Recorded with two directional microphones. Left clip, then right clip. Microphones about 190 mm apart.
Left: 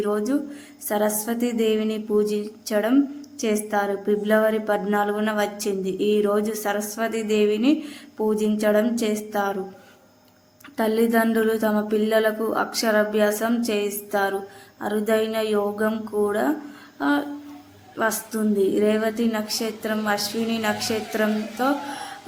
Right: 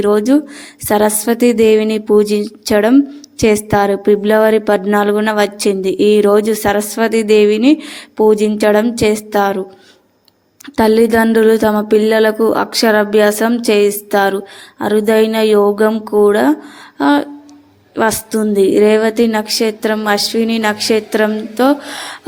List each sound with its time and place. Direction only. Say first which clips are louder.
0.0 s speech: right 12 dB; 35° right (ahead or behind)
10.8 s speech: right 10 dB; 40° right (ahead or behind)